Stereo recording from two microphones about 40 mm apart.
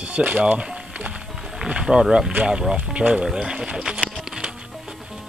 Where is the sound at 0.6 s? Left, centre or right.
Right.